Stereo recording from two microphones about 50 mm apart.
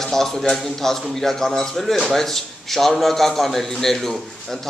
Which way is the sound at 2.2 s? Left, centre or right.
Centre.